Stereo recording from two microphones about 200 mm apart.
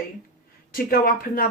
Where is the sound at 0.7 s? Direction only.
45° left (ahead or behind).